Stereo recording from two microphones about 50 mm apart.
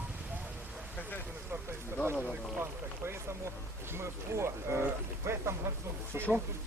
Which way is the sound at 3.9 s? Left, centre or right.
Right.